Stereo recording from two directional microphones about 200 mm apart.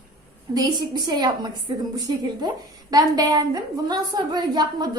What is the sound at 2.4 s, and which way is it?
A woman's voice, 20° right (ahead or behind).